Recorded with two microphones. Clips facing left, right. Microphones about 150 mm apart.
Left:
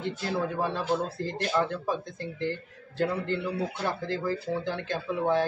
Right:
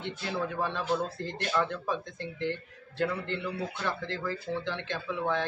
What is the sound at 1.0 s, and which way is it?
Speech, 5° left (ahead or behind).